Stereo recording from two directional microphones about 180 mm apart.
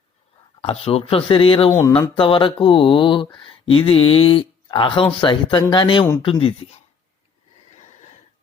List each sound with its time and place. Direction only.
0.6 s speech: 30° left (ahead or behind)